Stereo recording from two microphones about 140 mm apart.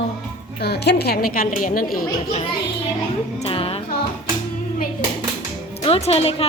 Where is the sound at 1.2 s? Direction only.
90° left.